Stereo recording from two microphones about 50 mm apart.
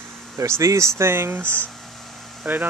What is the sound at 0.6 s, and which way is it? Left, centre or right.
Speech, right.